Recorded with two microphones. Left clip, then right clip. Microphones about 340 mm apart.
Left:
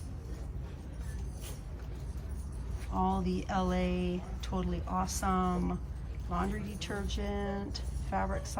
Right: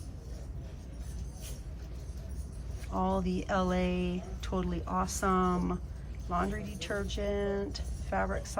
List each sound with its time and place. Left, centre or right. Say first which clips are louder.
2.9 s speech: right 1 dB; centre